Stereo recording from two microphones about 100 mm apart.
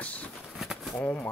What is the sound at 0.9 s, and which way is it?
Speech, 20° left (ahead or behind).